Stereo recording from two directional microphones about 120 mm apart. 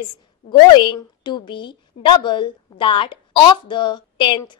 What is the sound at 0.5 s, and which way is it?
A woman's voice, 40° left (ahead or behind).